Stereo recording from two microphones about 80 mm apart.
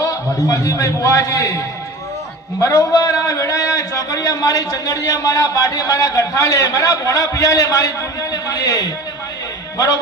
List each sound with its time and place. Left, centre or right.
0.0 s a man's voice: left